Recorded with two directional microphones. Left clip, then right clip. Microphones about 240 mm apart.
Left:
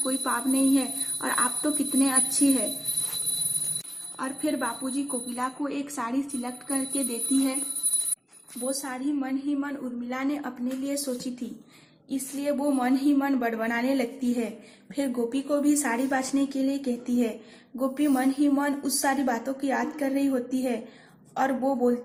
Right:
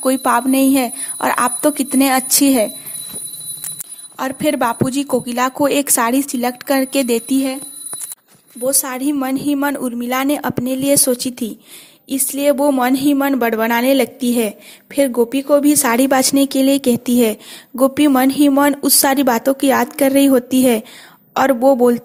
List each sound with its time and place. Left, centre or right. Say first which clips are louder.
0.0 s a woman's voice: right 13 dB; right
4.2 s a woman's voice: right 12 dB; right
8.6 s a woman's voice: right 12 dB; right